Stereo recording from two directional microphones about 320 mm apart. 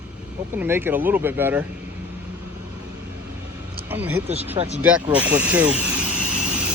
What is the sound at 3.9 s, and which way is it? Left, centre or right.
Speech, centre.